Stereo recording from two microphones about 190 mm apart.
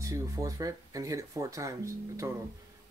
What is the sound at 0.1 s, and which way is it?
Speech, 20° right (ahead or behind).